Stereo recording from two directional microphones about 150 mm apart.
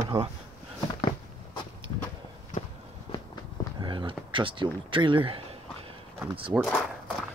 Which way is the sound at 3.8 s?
30° right (ahead or behind).